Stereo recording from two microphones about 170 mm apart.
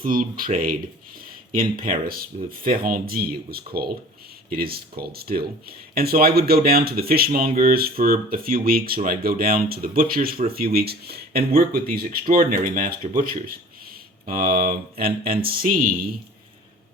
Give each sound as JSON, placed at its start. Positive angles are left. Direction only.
{"t": 0.0, "sound": "speech", "side_deg": -55}
{"t": 2.0, "sound": "speech", "side_deg": -60}
{"t": 14.3, "sound": "speech", "side_deg": -60}